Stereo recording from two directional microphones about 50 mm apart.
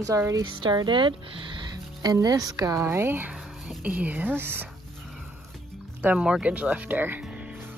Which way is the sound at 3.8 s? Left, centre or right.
Right.